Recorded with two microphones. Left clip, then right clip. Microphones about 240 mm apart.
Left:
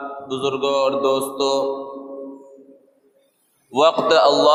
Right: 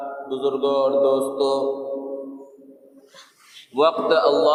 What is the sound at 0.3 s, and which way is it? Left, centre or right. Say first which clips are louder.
A man's voice: left 1 dB; left.